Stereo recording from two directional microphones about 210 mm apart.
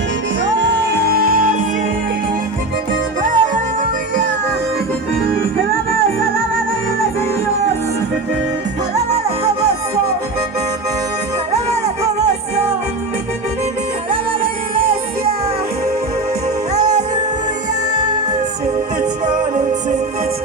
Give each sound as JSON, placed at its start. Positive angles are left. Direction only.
{"t": 0.4, "sound": "music", "side_deg": -55}
{"t": 3.2, "sound": "music", "side_deg": -40}
{"t": 9.0, "sound": "music", "side_deg": -30}
{"t": 11.5, "sound": "music", "side_deg": -30}
{"t": 17.9, "sound": "music", "side_deg": -20}
{"t": 19.2, "sound": "music", "side_deg": -35}